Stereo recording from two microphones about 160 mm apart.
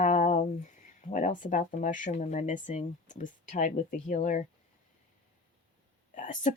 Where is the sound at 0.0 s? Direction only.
50° left (ahead or behind).